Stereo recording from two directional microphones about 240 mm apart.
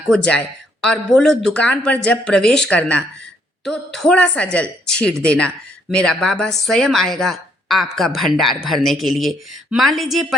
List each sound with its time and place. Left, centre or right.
0.1 s speech: centre